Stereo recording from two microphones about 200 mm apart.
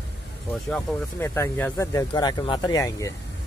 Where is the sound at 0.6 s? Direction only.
5° left (ahead or behind).